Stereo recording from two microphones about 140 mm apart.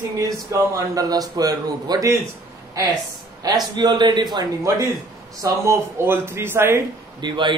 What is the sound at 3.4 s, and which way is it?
A man's voice, 30° right (ahead or behind).